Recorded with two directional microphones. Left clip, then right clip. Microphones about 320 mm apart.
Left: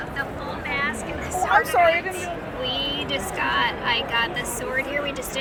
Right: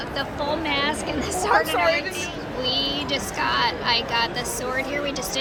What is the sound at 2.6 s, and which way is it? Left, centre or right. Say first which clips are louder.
Speech: right 2 dB; centre.